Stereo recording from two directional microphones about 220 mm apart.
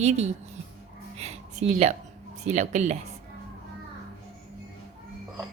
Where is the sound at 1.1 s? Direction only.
30° right (ahead or behind).